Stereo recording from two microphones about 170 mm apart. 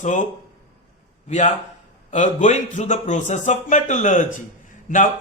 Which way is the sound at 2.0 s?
45° left (ahead or behind).